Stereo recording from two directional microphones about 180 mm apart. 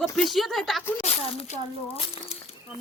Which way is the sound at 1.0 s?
40° left (ahead or behind).